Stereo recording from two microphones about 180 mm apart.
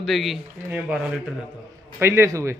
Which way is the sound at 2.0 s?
15° right (ahead or behind).